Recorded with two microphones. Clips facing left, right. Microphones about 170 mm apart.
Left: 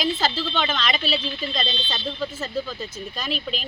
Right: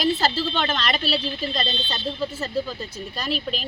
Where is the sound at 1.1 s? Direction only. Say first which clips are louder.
Right 1 dB; 40° right (ahead or behind).